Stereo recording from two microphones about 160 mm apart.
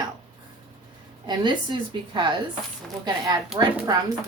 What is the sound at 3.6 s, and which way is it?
Speech, 30° right (ahead or behind).